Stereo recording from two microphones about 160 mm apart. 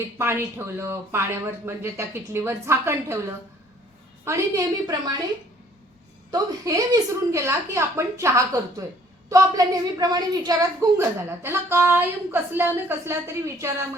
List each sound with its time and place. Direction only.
0.2 s a woman's voice: 15° right (ahead or behind)
4.3 s a woman's voice: 20° right (ahead or behind)
6.3 s a woman's voice: 20° right (ahead or behind)